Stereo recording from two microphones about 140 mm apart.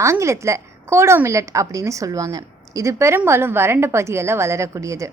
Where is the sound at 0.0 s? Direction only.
20° right (ahead or behind).